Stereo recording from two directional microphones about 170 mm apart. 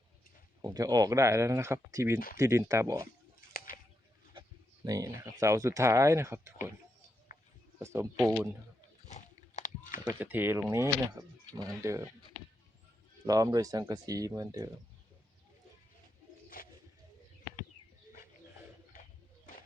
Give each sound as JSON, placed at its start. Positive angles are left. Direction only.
{"t": 0.6, "sound": "speech", "side_deg": -20}
{"t": 2.1, "sound": "speech", "side_deg": 55}
{"t": 2.4, "sound": "speech", "side_deg": -20}
{"t": 4.9, "sound": "speech", "side_deg": -20}
{"t": 8.2, "sound": "speech", "side_deg": 0}
{"t": 9.0, "sound": "chewing", "side_deg": 45}
{"t": 10.0, "sound": "speech", "side_deg": -10}
{"t": 13.2, "sound": "speech", "side_deg": -20}
{"t": 16.5, "sound": "bird", "side_deg": 55}